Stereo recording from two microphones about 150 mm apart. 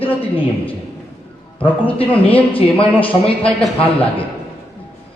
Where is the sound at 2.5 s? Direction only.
35° left (ahead or behind).